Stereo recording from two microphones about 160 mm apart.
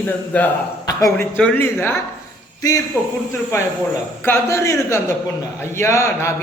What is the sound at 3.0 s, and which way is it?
Speech, 15° left (ahead or behind).